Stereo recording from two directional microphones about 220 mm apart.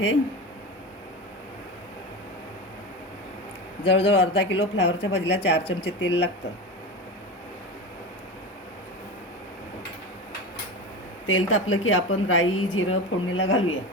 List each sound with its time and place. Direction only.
3.8 s speech: 50° left (ahead or behind)
11.3 s a woman's voice: 65° left (ahead or behind)